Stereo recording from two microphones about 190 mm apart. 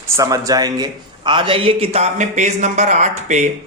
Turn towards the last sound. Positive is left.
turn(degrees=-40)  # may be behind; listen again after turning